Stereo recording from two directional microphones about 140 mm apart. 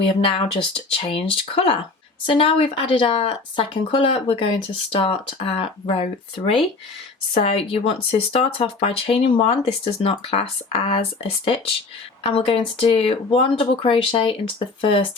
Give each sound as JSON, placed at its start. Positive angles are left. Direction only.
{"t": 0.0, "sound": "speech", "side_deg": 40}
{"t": 12.3, "sound": "speech", "side_deg": 40}